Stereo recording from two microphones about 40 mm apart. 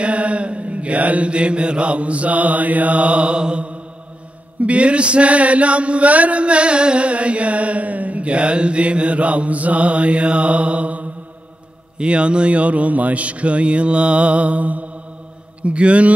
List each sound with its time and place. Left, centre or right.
0.0 s mantra: right